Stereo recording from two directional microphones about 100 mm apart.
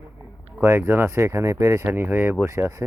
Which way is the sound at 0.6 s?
25° right (ahead or behind).